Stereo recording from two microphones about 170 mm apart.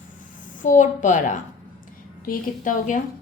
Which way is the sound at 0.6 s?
50° left (ahead or behind).